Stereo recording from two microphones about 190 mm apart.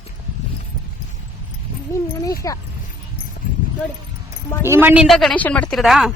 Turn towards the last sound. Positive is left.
turn(degrees=0)  # may be behind; listen again after turning